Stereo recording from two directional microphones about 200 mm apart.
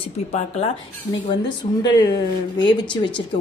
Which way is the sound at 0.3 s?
30° left (ahead or behind).